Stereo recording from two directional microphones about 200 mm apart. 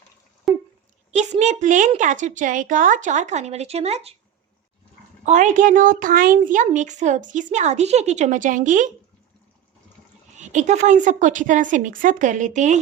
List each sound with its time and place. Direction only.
0.5 s a sound: centre (ahead or behind)
1.1 s a woman's voice: 35° right (ahead or behind)
5.2 s a woman's voice: 35° right (ahead or behind)
10.3 s a woman's voice: 35° right (ahead or behind)